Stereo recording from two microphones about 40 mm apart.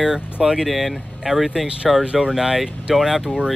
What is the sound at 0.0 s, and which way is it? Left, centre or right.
Speech, centre.